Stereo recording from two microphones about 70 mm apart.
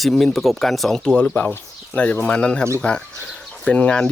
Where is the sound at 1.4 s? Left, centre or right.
Left.